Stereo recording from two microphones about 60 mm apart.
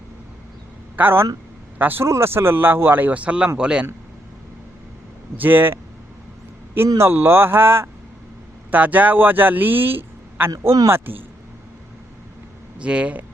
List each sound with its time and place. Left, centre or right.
0.9 s speech: right
2.0 s a man's voice: right; by 3.8 s centre
5.4 s speech: right
6.8 s speech: right
7.1 s speech: right
8.7 s a man's voice: right
12.8 s speech: centre